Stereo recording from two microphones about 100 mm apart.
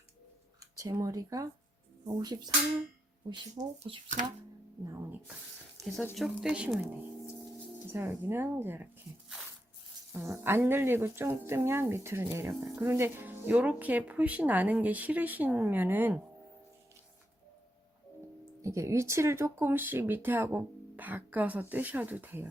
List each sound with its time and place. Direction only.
0.8 s speech: 35° right (ahead or behind); by 4.0 s 55° right (ahead or behind)
6.1 s speech: 5° right (ahead or behind)
7.9 s speech: 25° right (ahead or behind)
10.2 s speech: 25° right (ahead or behind)
18.6 s speech: 30° right (ahead or behind)